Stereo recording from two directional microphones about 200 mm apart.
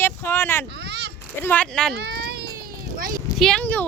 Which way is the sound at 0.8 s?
55° right (ahead or behind).